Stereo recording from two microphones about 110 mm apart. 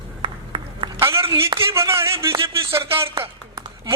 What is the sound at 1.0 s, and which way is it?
A man's voice, 25° right (ahead or behind).